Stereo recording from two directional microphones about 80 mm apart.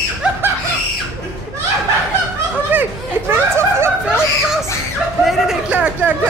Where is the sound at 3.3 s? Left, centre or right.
Right.